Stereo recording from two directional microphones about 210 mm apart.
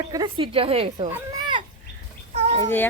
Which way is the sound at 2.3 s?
30° right (ahead or behind).